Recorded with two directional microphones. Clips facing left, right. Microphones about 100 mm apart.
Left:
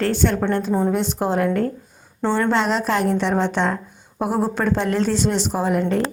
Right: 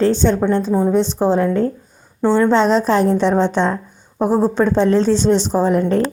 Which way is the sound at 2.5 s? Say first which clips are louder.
Right 6 dB; 30° right (ahead or behind).